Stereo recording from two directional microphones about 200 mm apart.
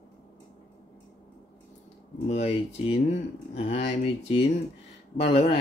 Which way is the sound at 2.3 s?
30° left (ahead or behind).